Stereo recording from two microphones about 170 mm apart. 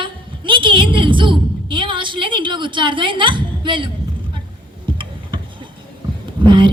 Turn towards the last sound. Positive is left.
turn(degrees=-30)  # may be behind; listen again after turning